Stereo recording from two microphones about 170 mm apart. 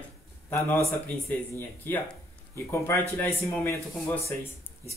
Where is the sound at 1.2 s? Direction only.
15° left (ahead or behind).